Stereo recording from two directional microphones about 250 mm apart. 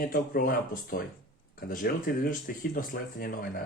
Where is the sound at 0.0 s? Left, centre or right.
Left.